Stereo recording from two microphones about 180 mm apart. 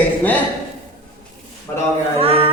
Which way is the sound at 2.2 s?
35° right (ahead or behind).